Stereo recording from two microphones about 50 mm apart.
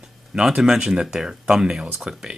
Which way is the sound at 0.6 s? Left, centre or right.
Centre.